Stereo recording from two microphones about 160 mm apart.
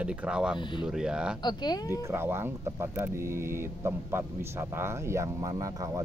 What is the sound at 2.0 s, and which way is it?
Speech, 15° right (ahead or behind).